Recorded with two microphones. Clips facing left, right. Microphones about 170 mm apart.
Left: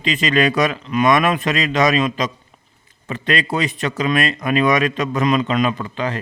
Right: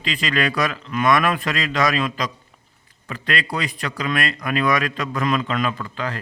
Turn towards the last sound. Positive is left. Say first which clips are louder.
# left 4 dB
turn(degrees=20)  # may be behind; listen again after turning